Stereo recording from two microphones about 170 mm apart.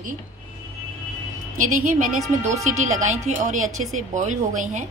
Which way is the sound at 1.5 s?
50° right (ahead or behind).